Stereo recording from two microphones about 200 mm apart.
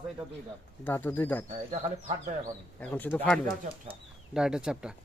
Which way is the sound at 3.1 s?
5° left (ahead or behind).